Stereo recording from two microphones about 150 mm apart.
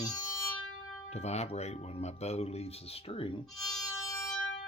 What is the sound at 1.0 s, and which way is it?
Speech, 45° left (ahead or behind).